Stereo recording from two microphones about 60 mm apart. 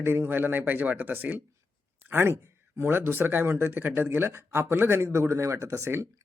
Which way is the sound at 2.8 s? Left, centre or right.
Right.